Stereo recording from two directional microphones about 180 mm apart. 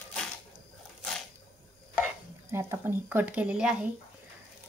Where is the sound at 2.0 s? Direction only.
15° right (ahead or behind).